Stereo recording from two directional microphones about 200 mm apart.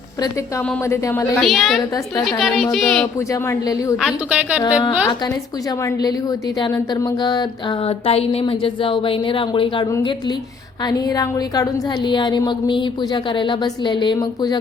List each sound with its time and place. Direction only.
0.6 s a woman's voice: 10° left (ahead or behind)
1.4 s a woman's voice: centre (ahead or behind)
3.2 s a woman's voice: 15° left (ahead or behind)
3.9 s a woman's voice: 5° right (ahead or behind)
4.6 s speech: 20° left (ahead or behind)